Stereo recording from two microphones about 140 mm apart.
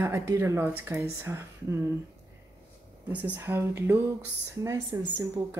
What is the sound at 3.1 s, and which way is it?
Speech, 10° right (ahead or behind).